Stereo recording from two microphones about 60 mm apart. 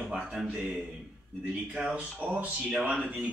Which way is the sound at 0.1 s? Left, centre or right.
Centre.